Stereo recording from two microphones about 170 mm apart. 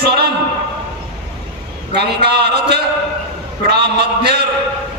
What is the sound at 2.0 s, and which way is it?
A man's voice, 80° right.